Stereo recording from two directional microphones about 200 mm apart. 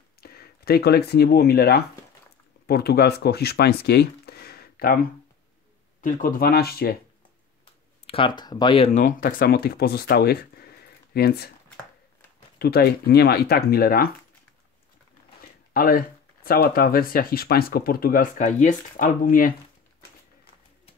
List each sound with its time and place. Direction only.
0.2 s speech: 50° left (ahead or behind)
8.1 s speech: 25° left (ahead or behind); by 11.5 s 50° left (ahead or behind)
12.5 s speech: 50° left (ahead or behind)
15.7 s speech: 45° left (ahead or behind)